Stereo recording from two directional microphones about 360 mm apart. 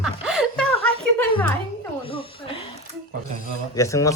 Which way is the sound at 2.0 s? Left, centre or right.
Centre.